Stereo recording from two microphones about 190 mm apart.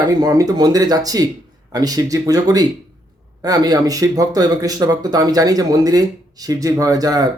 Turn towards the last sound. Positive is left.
turn(degrees=-20)  # may be behind; listen again after turning